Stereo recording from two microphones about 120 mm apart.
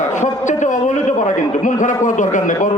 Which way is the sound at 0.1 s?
90° left.